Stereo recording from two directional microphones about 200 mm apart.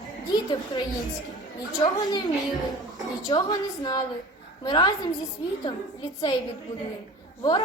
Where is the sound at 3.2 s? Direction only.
20° left (ahead or behind).